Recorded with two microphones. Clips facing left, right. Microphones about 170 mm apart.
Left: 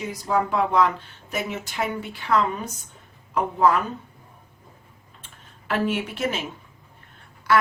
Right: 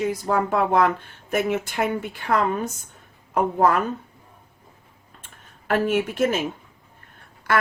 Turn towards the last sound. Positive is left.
turn(degrees=-50)  # may be behind; listen again after turning